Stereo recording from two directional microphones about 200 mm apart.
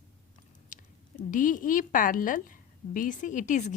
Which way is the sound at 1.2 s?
40° left (ahead or behind).